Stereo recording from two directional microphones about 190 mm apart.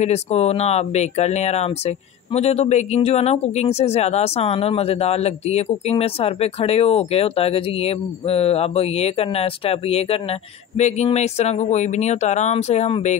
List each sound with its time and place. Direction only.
0.0 s speech: 35° left (ahead or behind)